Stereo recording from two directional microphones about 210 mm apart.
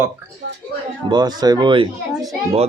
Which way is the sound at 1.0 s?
20° right (ahead or behind).